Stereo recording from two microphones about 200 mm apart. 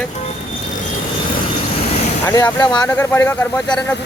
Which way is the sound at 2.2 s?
20° left (ahead or behind).